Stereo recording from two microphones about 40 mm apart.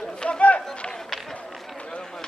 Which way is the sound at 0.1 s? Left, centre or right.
Left.